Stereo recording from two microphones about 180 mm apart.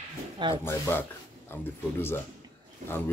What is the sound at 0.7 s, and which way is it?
Speech, 15° left (ahead or behind).